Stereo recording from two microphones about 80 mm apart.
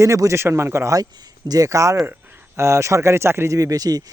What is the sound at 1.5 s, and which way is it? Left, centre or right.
Speech, right.